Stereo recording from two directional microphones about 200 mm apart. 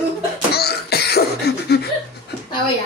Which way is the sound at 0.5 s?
55° left (ahead or behind).